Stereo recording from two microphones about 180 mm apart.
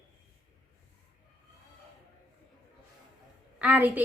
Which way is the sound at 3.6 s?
10° right (ahead or behind).